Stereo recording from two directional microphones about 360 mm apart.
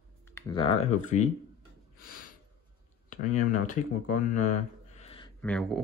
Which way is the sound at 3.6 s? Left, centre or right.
Left.